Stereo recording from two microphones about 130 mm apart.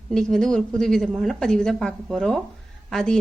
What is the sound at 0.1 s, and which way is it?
A woman's voice, 5° left (ahead or behind).